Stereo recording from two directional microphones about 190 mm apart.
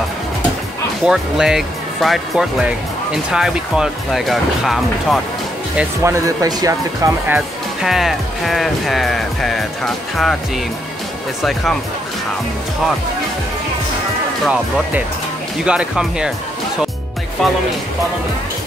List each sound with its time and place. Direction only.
1.0 s speech: 5° right (ahead or behind)
5.8 s speech: 15° right (ahead or behind)
7.3 s speech: centre (ahead or behind)
14.4 s speech: 5° right (ahead or behind)